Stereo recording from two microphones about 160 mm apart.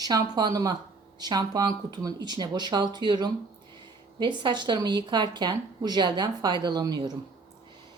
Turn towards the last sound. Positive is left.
turn(degrees=-25)  # may be behind; listen again after turning